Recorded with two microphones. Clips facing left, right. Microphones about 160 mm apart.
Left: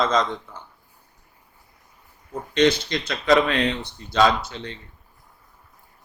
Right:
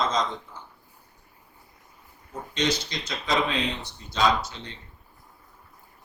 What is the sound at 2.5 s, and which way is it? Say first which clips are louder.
Speech: left 8 dB; 60° left (ahead or behind).